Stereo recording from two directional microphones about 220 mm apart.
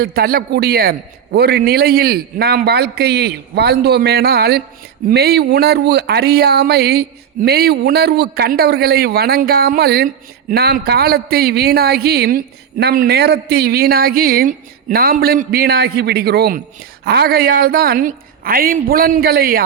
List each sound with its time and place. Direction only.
0.0 s a man's voice: 45° right (ahead or behind)